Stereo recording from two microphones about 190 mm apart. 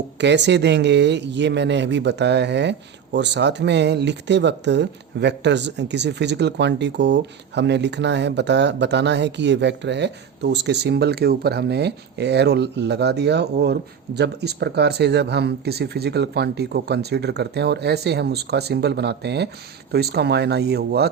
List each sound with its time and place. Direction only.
0.2 s speech: 65° right (ahead or behind)